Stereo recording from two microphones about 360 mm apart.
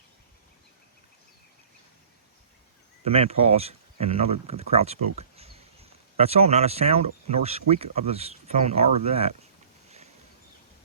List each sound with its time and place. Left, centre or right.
3.0 s speech: centre